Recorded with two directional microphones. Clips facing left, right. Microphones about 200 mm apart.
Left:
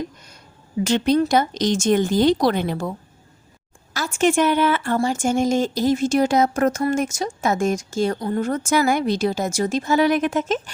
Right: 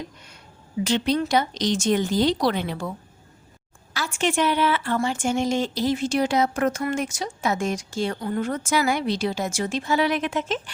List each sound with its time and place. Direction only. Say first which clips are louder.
0.9 s speech: left 5 dB; 45° left (ahead or behind)
3.9 s speech: left 5 dB; 45° left (ahead or behind)